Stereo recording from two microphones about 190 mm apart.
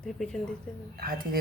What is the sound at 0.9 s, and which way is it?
Speech, 50° right (ahead or behind).